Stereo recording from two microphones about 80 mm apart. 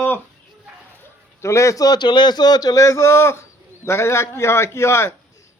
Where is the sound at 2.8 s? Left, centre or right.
Left.